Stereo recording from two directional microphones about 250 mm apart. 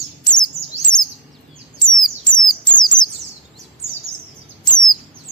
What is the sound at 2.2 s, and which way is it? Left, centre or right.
Bird, centre.